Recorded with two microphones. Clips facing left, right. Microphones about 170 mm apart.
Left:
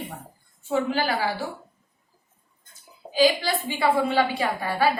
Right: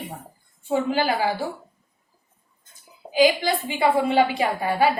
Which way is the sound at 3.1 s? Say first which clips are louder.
Right 2 dB; 20° right (ahead or behind).